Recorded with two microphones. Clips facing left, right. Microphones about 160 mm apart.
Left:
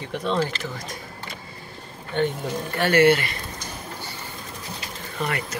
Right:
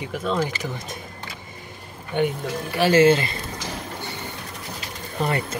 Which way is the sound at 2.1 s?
10° right (ahead or behind).